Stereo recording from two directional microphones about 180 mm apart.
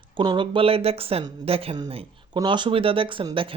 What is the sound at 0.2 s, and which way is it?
Speech, 25° right (ahead or behind).